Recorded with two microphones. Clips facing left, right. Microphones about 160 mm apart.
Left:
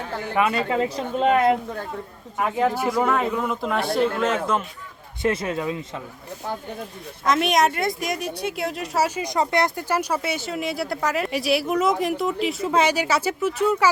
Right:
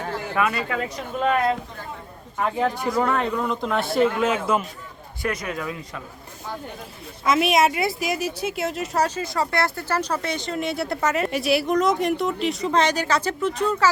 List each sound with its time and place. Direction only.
0.3 s speech: 25° left (ahead or behind)
2.4 s a woman's voice: 5° left (ahead or behind)
5.2 s speech: 30° left (ahead or behind)
7.3 s a woman's voice: 5° right (ahead or behind)
9.0 s speech: 15° left (ahead or behind)